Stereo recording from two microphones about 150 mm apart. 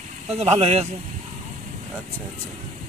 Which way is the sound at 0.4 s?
45° right (ahead or behind).